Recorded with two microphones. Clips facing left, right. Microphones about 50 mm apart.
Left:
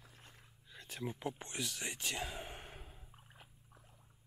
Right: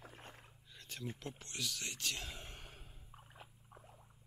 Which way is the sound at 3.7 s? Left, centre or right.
Right.